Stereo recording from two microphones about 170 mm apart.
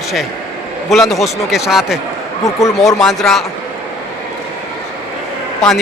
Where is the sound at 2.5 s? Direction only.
20° left (ahead or behind).